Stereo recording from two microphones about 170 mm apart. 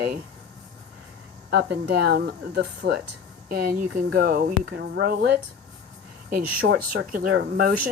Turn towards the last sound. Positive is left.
turn(degrees=-60)  # may be behind; listen again after turning